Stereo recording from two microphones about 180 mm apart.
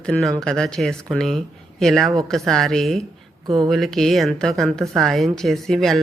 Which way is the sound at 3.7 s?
Centre (ahead or behind).